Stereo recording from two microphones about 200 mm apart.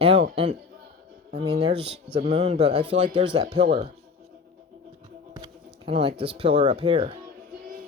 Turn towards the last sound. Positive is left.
turn(degrees=-30)  # may be behind; listen again after turning